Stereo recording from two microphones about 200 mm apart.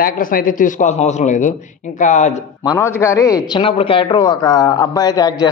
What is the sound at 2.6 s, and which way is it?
Speech, 10° left (ahead or behind).